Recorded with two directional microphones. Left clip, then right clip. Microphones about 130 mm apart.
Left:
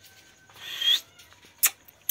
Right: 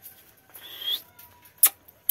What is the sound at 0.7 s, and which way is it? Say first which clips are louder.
Rodents: left 7 dB; 20° right (ahead or behind).